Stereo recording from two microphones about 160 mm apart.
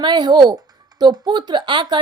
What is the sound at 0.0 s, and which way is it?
A woman's voice, 30° right (ahead or behind).